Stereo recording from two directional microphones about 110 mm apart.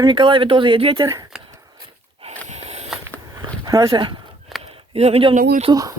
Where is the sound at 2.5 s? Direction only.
75° right (ahead or behind).